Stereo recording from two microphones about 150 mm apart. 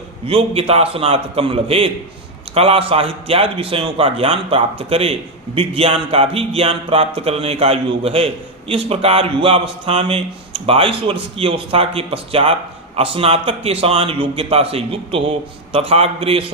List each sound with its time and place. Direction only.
0.3 s speech: 40° right (ahead or behind)